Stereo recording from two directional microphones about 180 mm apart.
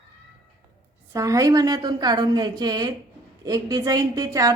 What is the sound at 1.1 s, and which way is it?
A woman's voice, 20° right (ahead or behind).